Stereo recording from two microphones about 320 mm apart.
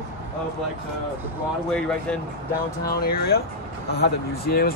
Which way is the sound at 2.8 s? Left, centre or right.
Left.